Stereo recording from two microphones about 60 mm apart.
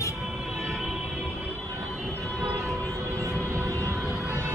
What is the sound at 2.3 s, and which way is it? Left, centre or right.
Music, right.